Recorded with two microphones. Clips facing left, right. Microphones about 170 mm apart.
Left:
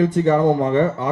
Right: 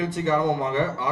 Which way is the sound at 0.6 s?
50° left (ahead or behind).